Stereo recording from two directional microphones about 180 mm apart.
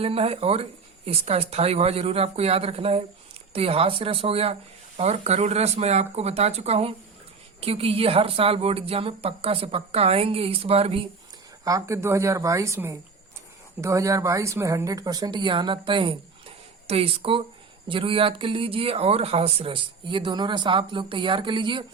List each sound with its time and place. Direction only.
0.0 s a woman's voice: 35° right (ahead or behind)
11.6 s a woman's voice: 15° right (ahead or behind)